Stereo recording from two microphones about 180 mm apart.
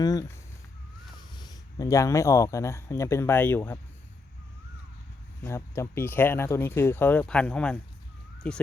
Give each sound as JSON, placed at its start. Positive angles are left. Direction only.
{"t": 0.0, "sound": "speech", "side_deg": 20}
{"t": 5.4, "sound": "speech", "side_deg": 15}